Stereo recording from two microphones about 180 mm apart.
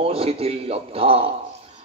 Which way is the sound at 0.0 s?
35° right (ahead or behind).